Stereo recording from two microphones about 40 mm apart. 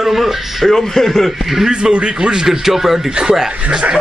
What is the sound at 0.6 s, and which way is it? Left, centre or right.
Speech, centre.